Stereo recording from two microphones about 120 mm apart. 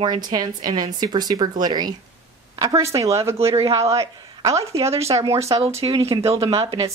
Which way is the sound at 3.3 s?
55° right (ahead or behind).